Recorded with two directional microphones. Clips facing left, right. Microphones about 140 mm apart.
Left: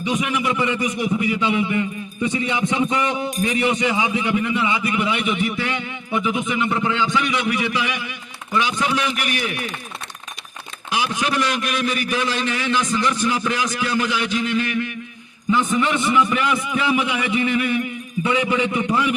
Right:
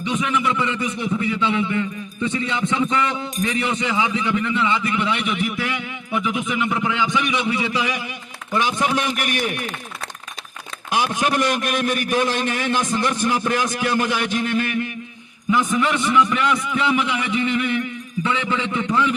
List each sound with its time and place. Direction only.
0.0 s a man's voice: 10° left (ahead or behind); by 8.0 s 35° right (ahead or behind)
8.5 s a man's voice: 45° right (ahead or behind)
10.9 s a man's voice: 50° right (ahead or behind)
15.7 s a man's voice: centre (ahead or behind)